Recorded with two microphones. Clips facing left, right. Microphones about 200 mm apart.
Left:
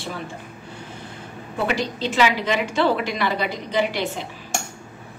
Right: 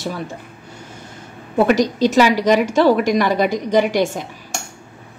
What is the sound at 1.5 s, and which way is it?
A woman's voice, 40° right (ahead or behind).